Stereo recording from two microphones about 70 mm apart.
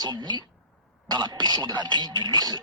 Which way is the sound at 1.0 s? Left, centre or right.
Right.